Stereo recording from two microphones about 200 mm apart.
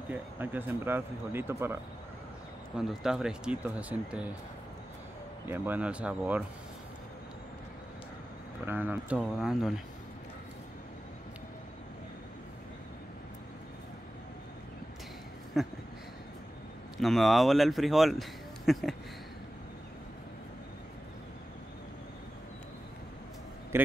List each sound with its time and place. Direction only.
0.1 s speech: 10° right (ahead or behind)
2.8 s speech: centre (ahead or behind)
5.5 s speech: 10° right (ahead or behind)
8.6 s speech: 10° right (ahead or behind)
15.5 s speech: centre (ahead or behind)
16.9 s speech: centre (ahead or behind)
23.7 s a man's voice: 10° right (ahead or behind)